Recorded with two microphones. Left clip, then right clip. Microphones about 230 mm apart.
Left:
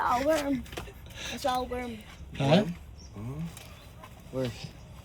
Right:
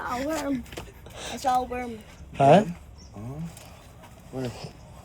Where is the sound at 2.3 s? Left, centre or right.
Left.